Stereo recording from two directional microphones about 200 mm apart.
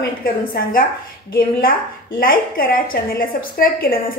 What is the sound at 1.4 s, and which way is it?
A woman's voice, 45° left (ahead or behind).